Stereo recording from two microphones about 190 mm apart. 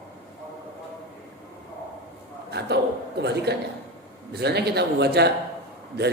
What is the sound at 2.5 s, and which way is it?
A man's voice, 60° right (ahead or behind).